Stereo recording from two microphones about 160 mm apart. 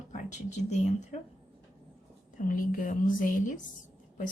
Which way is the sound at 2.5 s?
60° left (ahead or behind).